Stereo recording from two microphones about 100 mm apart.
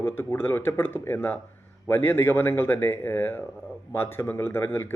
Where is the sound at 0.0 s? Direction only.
25° left (ahead or behind).